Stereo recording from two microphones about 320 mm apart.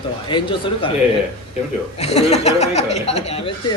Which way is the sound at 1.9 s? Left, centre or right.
Centre.